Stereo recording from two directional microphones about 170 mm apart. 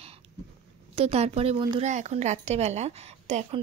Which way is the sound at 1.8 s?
45° right (ahead or behind).